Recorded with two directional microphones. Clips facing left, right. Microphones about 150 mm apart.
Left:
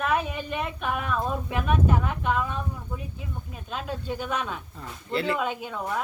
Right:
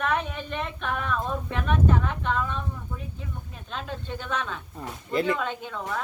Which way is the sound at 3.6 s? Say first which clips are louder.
Left 3 dB; 5° left (ahead or behind).